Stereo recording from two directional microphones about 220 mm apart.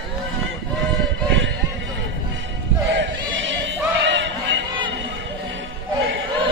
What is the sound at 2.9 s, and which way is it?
Choir, 60° right (ahead or behind).